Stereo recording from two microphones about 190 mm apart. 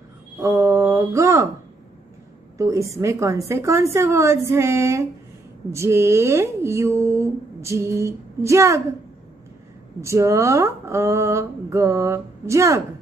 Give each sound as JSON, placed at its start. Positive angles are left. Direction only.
{"t": 0.4, "sound": "a sound", "side_deg": -15}
{"t": 2.5, "sound": "speech", "side_deg": -15}
{"t": 10.0, "sound": "speech", "side_deg": -15}